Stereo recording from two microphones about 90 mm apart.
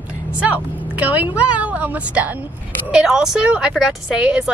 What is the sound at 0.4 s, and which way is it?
Speech, 15° right (ahead or behind).